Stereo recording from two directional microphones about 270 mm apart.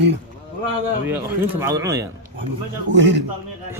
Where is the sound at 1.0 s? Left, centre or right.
Centre.